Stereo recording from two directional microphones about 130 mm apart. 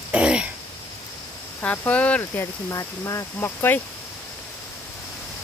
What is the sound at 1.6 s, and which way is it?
Speech, 10° left (ahead or behind).